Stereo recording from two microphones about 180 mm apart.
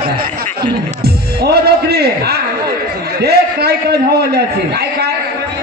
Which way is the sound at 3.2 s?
65° right (ahead or behind).